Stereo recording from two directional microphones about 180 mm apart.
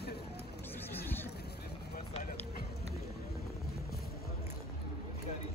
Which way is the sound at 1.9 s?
50° left (ahead or behind).